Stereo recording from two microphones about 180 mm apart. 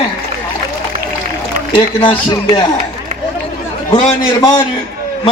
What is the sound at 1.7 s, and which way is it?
A man's voice, 25° left (ahead or behind).